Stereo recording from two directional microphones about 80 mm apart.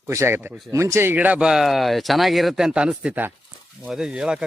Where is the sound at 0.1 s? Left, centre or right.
Right.